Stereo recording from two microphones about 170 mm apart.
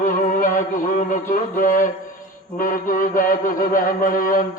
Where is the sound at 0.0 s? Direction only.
50° left (ahead or behind).